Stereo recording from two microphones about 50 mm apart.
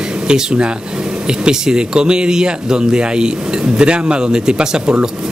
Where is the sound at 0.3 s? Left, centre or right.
Centre.